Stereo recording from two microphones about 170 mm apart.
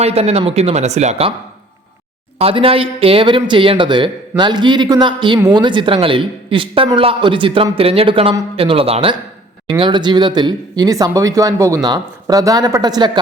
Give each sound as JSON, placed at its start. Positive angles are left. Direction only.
{"t": 0.0, "sound": "speech", "side_deg": -35}
{"t": 2.4, "sound": "speech", "side_deg": -35}